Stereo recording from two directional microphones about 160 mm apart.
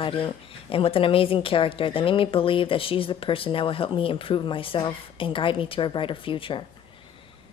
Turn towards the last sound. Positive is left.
turn(degrees=30)  # may be behind; listen again after turning